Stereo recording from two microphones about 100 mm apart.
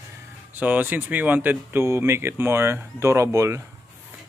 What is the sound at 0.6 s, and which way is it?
Speech, 15° right (ahead or behind).